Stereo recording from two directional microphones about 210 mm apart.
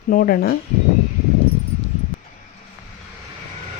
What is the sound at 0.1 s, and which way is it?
Speech, 45° left (ahead or behind).